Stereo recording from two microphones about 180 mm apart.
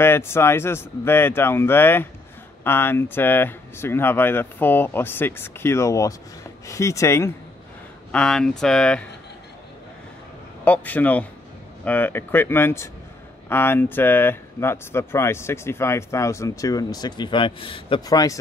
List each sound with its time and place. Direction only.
0.0 s speech: 15° left (ahead or behind)
8.1 s speech: 5° left (ahead or behind)
10.6 s speech: 10° left (ahead or behind)